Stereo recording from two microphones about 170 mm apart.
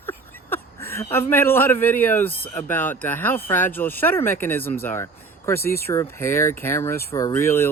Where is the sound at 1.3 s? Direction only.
10° left (ahead or behind).